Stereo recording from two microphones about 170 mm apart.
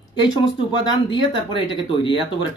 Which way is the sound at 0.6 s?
30° left (ahead or behind).